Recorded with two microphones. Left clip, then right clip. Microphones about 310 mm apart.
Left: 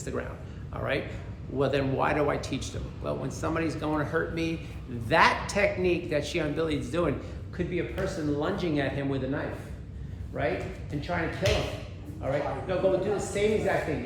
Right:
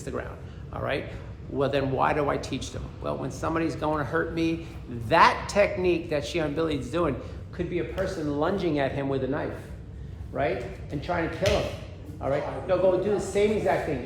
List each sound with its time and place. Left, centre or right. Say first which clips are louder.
0.0 s speech: right 1 dB; centre
11.4 s speech: right 3 dB; centre
12.2 s speech: right 2 dB; centre